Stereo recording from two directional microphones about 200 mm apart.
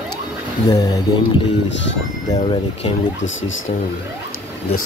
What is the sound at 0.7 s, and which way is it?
Speech, 20° left (ahead or behind).